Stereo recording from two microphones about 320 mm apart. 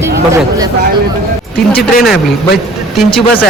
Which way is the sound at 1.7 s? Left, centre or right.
Left.